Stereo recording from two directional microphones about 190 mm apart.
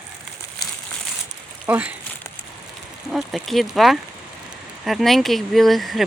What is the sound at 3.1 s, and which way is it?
Speech, centre (ahead or behind).